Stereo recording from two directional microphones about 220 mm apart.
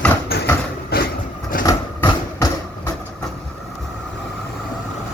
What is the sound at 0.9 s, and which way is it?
Vehicle, 45° left (ahead or behind).